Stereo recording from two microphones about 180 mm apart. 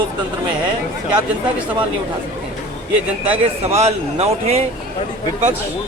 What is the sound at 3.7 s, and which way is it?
Speech, 35° right (ahead or behind).